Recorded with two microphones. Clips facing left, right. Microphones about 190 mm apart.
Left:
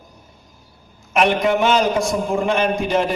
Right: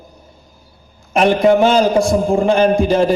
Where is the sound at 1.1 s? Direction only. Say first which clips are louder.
Right 5 dB; 35° right (ahead or behind).